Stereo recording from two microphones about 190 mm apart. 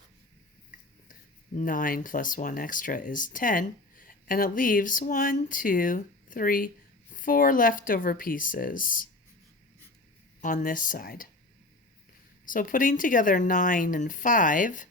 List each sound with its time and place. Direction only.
1.5 s speech: 45° left (ahead or behind)
10.4 s speech: 45° left (ahead or behind)
12.5 s speech: 45° left (ahead or behind)